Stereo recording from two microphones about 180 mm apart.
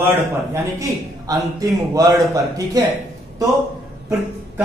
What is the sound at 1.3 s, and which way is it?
Speech, 20° right (ahead or behind).